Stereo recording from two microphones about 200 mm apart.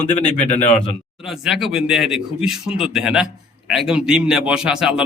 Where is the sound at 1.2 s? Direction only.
5° right (ahead or behind).